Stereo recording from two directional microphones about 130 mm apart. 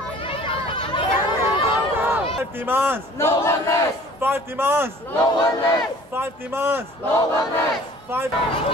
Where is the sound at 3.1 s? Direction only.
20° left (ahead or behind).